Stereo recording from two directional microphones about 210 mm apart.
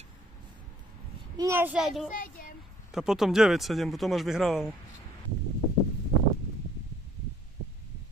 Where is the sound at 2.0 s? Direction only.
40° left (ahead or behind).